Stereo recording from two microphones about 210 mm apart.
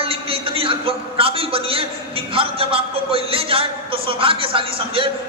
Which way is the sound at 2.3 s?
25° right (ahead or behind).